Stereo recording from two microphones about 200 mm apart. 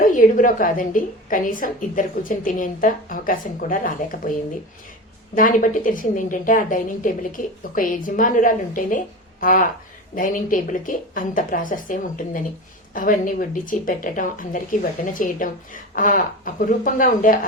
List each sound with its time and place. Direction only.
0.0 s speech: 40° left (ahead or behind)